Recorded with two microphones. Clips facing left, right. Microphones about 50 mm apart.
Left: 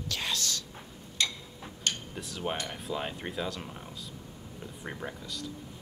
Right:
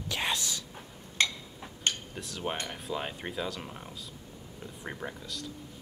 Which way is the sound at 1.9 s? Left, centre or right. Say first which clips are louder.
Right 1 dB; right.